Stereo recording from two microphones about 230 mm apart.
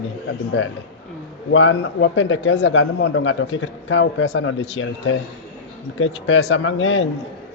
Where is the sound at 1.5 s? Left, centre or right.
Left.